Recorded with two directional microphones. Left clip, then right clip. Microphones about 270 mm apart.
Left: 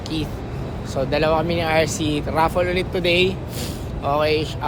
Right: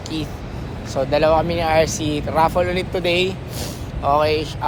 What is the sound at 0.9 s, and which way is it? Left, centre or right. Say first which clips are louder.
Speech: right 3 dB; centre.